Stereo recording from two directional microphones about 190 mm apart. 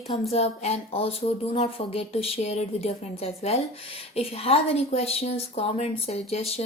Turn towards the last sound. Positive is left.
turn(degrees=30)  # may be behind; listen again after turning